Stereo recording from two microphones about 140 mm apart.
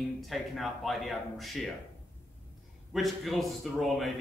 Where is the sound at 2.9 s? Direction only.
Centre (ahead or behind).